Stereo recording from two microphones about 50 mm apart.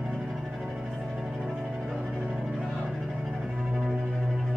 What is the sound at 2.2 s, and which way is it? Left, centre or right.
Music, right.